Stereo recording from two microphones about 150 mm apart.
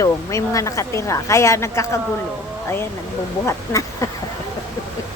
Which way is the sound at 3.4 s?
20° left (ahead or behind).